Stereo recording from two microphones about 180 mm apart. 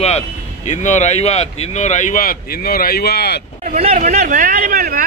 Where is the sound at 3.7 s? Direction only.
35° right (ahead or behind); by 5.0 s 55° right (ahead or behind).